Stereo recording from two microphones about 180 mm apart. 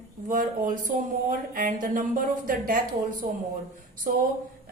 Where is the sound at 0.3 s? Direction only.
50° right (ahead or behind).